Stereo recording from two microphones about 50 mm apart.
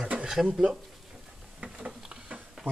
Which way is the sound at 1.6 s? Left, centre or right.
Right.